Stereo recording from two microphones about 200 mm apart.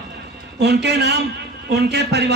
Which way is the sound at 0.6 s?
55° right (ahead or behind).